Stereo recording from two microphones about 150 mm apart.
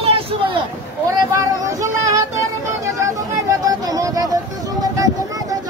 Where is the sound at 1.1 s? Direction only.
25° right (ahead or behind).